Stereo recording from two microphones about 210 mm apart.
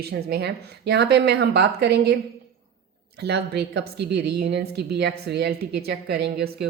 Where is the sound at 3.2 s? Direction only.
50° right (ahead or behind).